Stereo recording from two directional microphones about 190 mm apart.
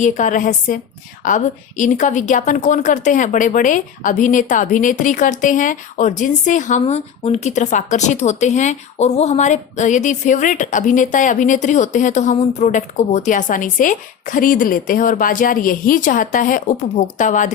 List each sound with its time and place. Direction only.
0.0 s a woman's voice: 40° left (ahead or behind)